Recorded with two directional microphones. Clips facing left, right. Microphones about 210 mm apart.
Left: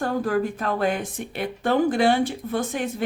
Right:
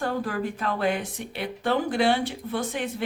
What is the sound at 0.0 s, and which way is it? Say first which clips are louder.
Speech: left 4 dB; 45° left (ahead or behind).